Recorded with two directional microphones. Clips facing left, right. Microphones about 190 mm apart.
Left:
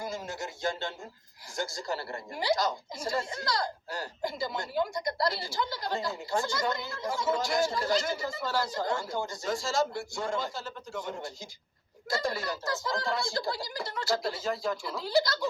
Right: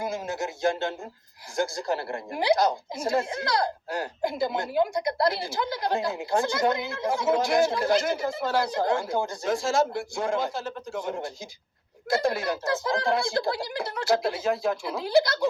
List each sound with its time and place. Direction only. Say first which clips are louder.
0.0 s speech: right 6 dB; 55° right (ahead or behind)